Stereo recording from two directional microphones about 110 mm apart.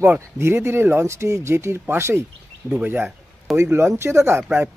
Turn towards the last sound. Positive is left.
turn(degrees=-20)  # may be behind; listen again after turning